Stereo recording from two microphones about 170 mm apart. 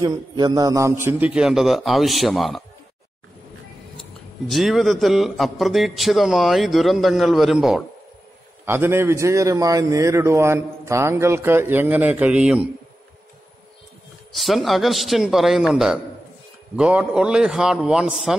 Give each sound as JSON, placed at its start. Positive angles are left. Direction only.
{"t": 0.0, "sound": "a man's voice", "side_deg": -20}
{"t": 4.5, "sound": "a man's voice", "side_deg": 0}
{"t": 8.6, "sound": "a man's voice", "side_deg": -15}
{"t": 14.3, "sound": "a man's voice", "side_deg": 0}